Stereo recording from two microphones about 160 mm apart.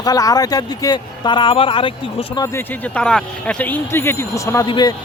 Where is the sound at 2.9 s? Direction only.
5° left (ahead or behind); by 4.9 s 25° left (ahead or behind).